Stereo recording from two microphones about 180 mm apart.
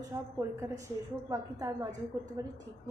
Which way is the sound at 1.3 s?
20° right (ahead or behind).